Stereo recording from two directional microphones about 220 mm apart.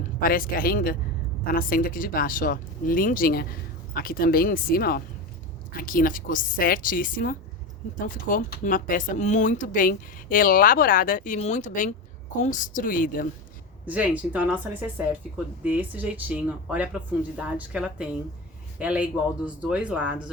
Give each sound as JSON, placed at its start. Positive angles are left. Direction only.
{"t": 0.2, "sound": "speech", "side_deg": 40}
{"t": 13.8, "sound": "speech", "side_deg": -5}